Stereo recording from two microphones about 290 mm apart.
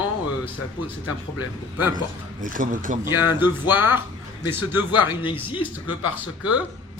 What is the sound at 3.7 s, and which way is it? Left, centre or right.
Speech, centre.